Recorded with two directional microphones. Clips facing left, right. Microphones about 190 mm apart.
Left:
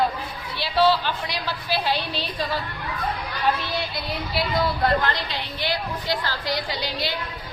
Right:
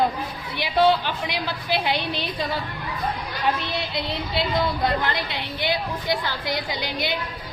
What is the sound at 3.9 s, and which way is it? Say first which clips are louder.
Speech: right 1 dB; 25° right (ahead or behind).